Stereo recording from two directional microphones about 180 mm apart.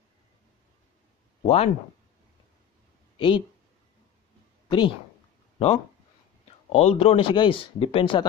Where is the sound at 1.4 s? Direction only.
35° left (ahead or behind).